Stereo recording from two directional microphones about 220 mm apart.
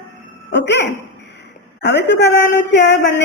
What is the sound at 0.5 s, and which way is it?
A woman's voice, 50° left (ahead or behind).